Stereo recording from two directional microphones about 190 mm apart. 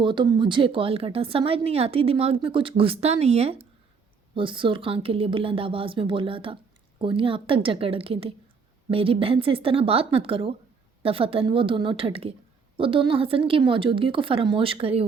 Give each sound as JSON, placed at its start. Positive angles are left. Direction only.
{"t": 0.0, "sound": "a woman's voice", "side_deg": -25}